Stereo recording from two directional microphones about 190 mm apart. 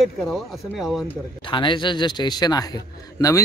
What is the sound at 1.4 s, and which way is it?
A man's voice, 25° left (ahead or behind).